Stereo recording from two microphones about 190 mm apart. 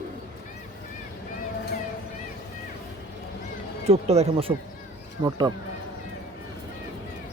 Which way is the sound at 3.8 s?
35° right (ahead or behind).